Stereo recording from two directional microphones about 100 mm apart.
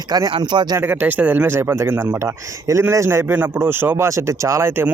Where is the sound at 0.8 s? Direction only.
20° right (ahead or behind).